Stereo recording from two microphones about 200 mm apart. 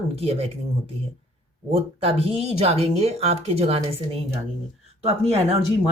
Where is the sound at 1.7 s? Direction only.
30° right (ahead or behind).